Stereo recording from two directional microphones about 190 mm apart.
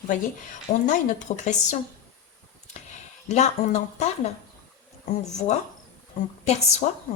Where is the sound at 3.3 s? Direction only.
35° left (ahead or behind).